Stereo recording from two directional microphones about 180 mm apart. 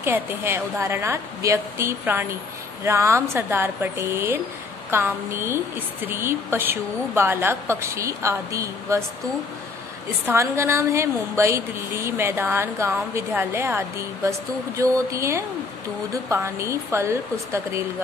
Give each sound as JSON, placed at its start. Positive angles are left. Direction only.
{"t": 0.0, "sound": "a woman's voice", "side_deg": -10}
{"t": 10.2, "sound": "a woman's voice", "side_deg": -15}